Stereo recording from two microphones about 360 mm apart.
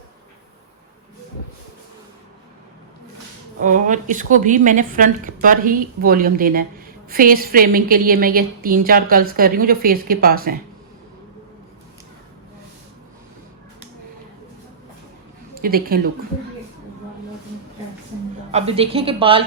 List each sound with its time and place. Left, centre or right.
3.6 s a woman's voice: right
15.6 s a woman's voice: right
18.5 s a woman's voice: centre